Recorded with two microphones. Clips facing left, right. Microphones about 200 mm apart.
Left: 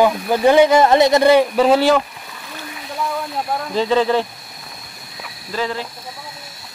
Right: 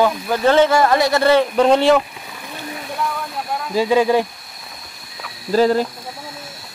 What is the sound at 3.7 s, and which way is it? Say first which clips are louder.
Speech: right 2 dB; 10° right (ahead or behind).